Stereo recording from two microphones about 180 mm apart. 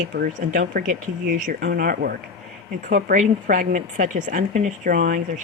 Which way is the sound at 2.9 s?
45° right (ahead or behind).